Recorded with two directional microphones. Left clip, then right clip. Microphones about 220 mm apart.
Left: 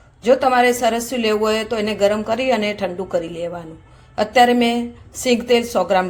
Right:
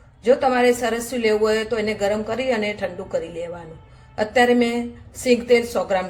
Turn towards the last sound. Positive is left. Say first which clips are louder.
# left 2 dB
turn(degrees=30)  # may be behind; listen again after turning